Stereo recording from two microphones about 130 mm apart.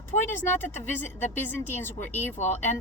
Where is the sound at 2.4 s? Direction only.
65° left (ahead or behind).